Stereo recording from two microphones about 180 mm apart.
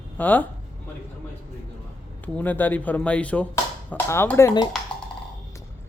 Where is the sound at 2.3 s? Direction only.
10° left (ahead or behind).